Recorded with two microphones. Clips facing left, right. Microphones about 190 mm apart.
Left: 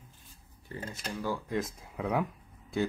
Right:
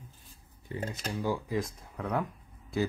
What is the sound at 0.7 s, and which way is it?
Speech, 20° right (ahead or behind).